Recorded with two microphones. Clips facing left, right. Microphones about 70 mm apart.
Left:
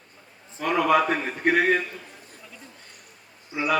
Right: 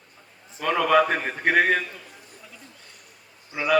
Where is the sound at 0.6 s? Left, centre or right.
Right.